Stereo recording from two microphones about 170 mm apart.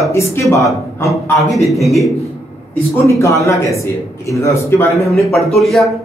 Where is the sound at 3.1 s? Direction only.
15° left (ahead or behind).